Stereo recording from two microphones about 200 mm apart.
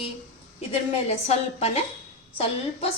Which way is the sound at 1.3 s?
30° left (ahead or behind).